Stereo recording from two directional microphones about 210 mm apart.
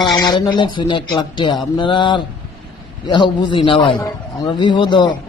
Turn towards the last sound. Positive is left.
turn(degrees=20)  # may be behind; listen again after turning